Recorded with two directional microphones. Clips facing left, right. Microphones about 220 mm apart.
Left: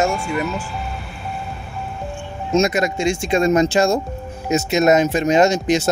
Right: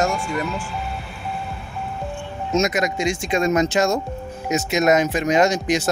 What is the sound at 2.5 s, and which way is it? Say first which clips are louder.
Speech: left 3 dB; 30° left (ahead or behind).